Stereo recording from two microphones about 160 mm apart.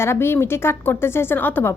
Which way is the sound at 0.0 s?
15° left (ahead or behind).